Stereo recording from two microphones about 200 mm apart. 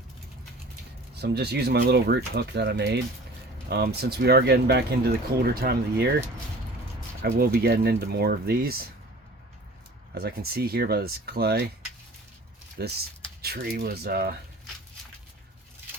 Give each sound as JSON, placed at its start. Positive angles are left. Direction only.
{"t": 1.2, "sound": "speech", "side_deg": -55}
{"t": 7.2, "sound": "speech", "side_deg": -50}
{"t": 10.2, "sound": "speech", "side_deg": -50}
{"t": 12.8, "sound": "speech", "side_deg": -55}